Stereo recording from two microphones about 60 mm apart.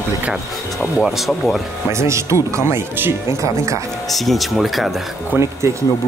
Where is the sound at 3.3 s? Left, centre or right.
Right.